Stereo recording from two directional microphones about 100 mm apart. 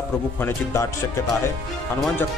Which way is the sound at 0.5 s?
30° left (ahead or behind).